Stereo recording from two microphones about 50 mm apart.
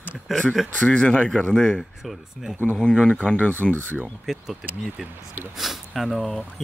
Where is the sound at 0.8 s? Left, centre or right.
Left.